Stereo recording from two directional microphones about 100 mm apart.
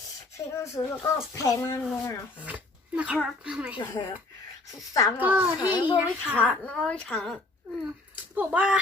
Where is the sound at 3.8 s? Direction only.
45° left (ahead or behind).